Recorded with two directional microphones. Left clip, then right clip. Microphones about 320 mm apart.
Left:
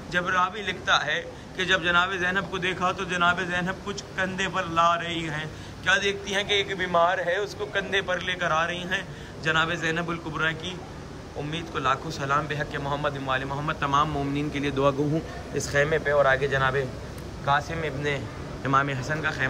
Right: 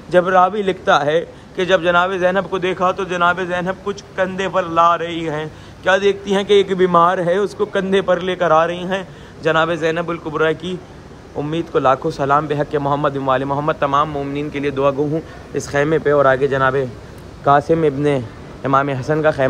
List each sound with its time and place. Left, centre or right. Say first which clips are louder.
0.1 s a man's voice: right 12 dB; centre